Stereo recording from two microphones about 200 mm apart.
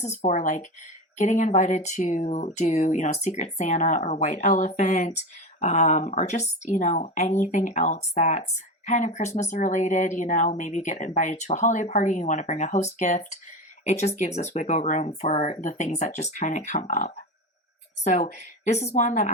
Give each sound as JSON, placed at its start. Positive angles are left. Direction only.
{"t": 0.2, "sound": "speech", "side_deg": 35}